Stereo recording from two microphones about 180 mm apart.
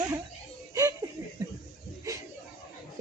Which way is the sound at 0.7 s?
20° right (ahead or behind).